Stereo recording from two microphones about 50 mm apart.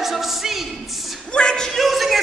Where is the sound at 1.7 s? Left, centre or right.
Centre.